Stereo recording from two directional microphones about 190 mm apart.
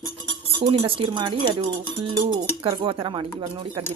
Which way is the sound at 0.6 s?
25° right (ahead or behind).